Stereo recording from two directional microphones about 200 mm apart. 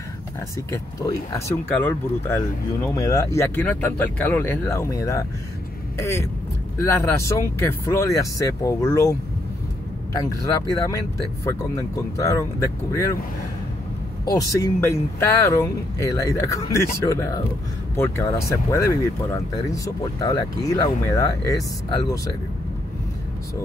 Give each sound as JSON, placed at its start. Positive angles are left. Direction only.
{"t": 1.7, "sound": "speech", "side_deg": 10}
{"t": 10.1, "sound": "speech", "side_deg": 15}
{"t": 14.2, "sound": "speech", "side_deg": 15}